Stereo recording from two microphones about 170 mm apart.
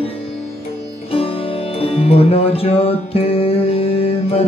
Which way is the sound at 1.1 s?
35° left (ahead or behind).